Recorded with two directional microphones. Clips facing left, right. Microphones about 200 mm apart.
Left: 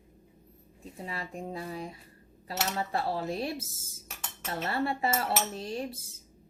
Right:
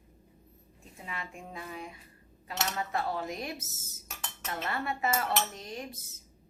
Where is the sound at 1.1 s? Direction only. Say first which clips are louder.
Left 4 dB; 35° left (ahead or behind).